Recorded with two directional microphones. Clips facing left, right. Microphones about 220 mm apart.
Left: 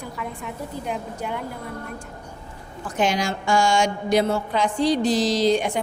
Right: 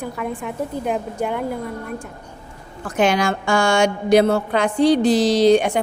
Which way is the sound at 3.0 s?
60° right (ahead or behind).